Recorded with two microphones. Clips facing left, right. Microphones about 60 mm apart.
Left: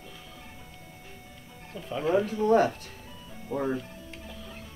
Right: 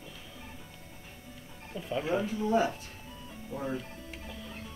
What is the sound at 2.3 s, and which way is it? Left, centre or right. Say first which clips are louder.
Speech: left 6 dB; left.